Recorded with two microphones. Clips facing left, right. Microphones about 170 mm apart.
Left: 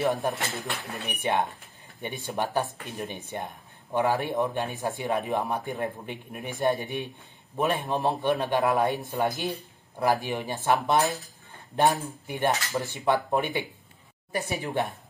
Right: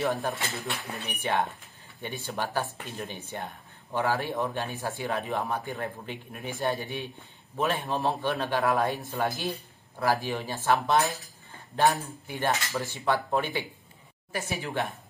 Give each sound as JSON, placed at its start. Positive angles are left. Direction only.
{"t": 0.0, "sound": "speech", "side_deg": 20}